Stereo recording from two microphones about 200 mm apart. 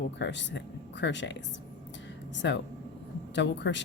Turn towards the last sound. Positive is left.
turn(degrees=65)  # may be behind; listen again after turning